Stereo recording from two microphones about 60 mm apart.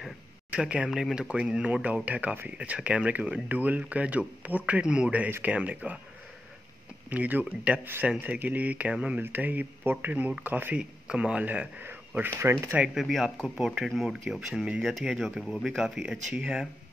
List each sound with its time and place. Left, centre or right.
0.5 s speech: centre
0.8 s speech: centre; by 5.9 s right
7.1 s speech: right
9.2 s speech: right
10.8 s speech: centre
12.4 s speech: right
12.9 s speech: centre
15.8 s speech: centre